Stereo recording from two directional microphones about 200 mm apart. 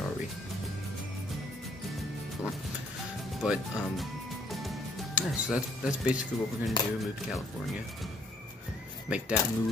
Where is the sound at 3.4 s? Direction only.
Centre (ahead or behind).